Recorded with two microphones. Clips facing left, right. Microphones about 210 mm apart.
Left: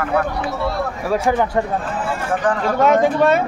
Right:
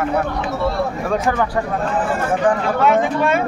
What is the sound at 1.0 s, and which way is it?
Speech, 10° left (ahead or behind).